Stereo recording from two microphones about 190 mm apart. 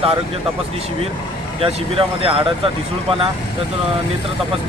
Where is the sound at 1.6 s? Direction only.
30° right (ahead or behind).